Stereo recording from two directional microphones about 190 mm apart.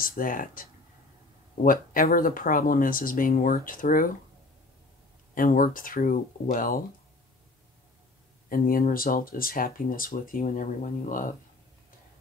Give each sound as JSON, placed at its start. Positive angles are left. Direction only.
{"t": 0.0, "sound": "speech", "side_deg": 45}
{"t": 5.3, "sound": "speech", "side_deg": 45}
{"t": 8.5, "sound": "speech", "side_deg": 50}